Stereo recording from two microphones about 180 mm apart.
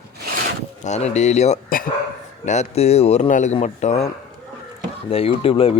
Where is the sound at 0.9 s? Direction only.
40° left (ahead or behind).